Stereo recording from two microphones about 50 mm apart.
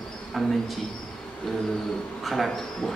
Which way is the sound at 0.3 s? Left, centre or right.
Centre.